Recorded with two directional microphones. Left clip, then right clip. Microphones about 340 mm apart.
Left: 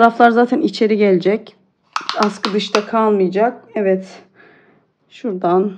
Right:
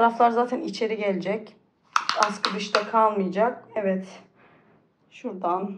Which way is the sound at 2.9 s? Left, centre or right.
Left.